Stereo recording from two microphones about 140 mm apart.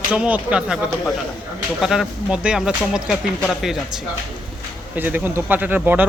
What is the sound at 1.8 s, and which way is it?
Speech, centre (ahead or behind).